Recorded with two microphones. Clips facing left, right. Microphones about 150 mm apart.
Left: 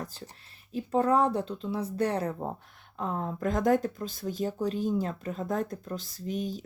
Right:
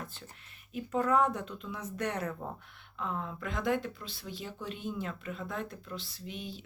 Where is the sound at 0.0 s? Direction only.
35° left (ahead or behind).